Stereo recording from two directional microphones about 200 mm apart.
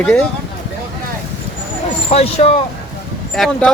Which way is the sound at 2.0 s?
30° left (ahead or behind).